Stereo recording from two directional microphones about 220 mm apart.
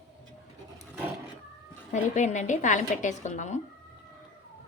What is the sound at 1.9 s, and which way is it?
A woman's voice, 35° left (ahead or behind).